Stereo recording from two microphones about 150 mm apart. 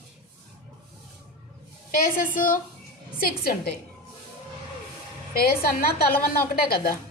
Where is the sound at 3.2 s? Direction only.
90° left.